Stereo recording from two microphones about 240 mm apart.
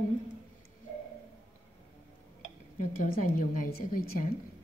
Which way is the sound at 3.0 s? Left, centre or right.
Left.